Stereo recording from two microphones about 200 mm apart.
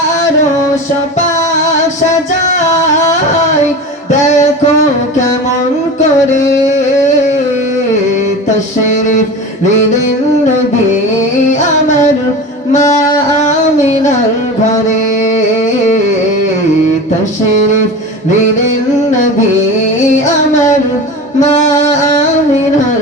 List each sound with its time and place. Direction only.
2.5 s singing: 35° left (ahead or behind)
4.2 s music: 35° left (ahead or behind)
21.4 s music: 35° left (ahead or behind)